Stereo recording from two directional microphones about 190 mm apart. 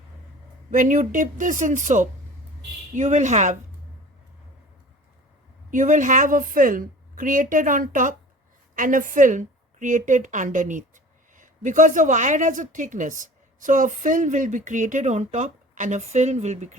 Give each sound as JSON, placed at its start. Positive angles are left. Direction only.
{"t": 0.7, "sound": "a woman's voice", "side_deg": -45}
{"t": 5.7, "sound": "a woman's voice", "side_deg": -40}